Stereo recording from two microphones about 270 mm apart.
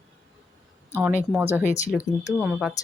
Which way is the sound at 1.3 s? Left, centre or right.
Centre.